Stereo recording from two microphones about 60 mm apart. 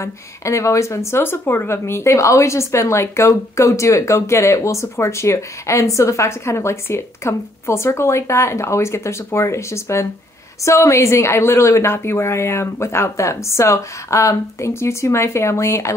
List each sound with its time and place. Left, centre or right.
0.0 s speech: left